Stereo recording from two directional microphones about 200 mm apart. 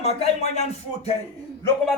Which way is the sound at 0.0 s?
30° left (ahead or behind).